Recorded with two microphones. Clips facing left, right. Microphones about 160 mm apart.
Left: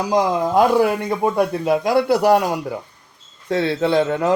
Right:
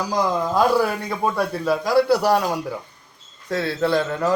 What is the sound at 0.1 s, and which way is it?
Speech, 20° left (ahead or behind).